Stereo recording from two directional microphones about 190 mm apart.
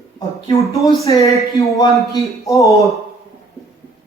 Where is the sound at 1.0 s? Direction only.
15° left (ahead or behind).